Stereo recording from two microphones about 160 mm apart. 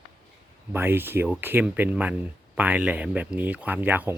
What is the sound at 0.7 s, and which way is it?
Speech, 15° right (ahead or behind).